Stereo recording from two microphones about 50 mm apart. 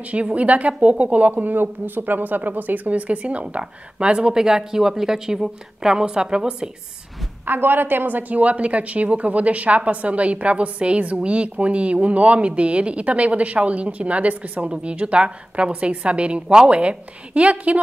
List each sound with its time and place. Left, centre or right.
0.1 s a woman's voice: right
7.4 s a woman's voice: right